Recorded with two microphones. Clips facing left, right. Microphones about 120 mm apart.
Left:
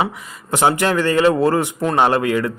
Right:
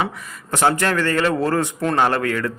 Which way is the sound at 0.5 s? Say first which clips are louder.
Left 2 dB; 15° left (ahead or behind).